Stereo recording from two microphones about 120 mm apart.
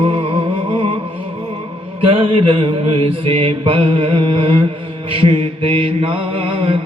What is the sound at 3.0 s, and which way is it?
Mantra, 50° right (ahead or behind).